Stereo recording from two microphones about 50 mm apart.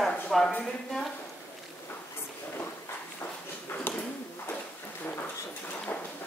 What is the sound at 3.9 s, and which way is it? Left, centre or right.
Bird, left.